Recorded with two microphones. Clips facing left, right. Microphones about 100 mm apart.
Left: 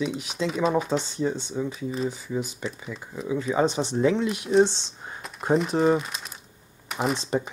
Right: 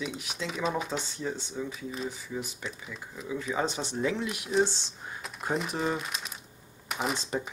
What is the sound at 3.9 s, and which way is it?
Speech, 25° left (ahead or behind).